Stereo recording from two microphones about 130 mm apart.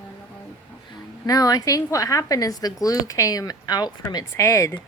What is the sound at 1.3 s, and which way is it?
Speech, 30° left (ahead or behind).